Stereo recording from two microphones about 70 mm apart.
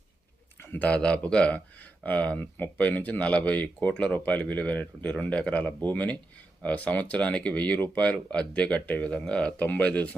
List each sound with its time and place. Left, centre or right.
0.7 s speech: centre